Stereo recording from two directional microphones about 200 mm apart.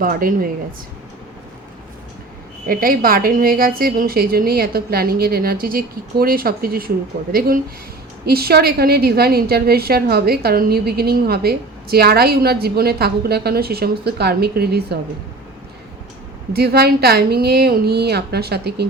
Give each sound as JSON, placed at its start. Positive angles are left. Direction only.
{"t": 0.0, "sound": "a woman's voice", "side_deg": -45}
{"t": 2.6, "sound": "a woman's voice", "side_deg": -45}
{"t": 16.5, "sound": "a woman's voice", "side_deg": -50}